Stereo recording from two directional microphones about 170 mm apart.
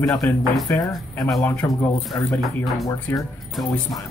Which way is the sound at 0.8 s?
20° left (ahead or behind).